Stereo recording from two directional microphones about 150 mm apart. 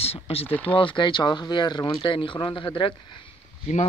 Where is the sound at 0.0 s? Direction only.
40° left (ahead or behind).